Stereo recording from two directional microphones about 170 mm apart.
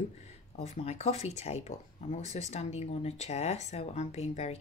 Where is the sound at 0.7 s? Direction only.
40° left (ahead or behind).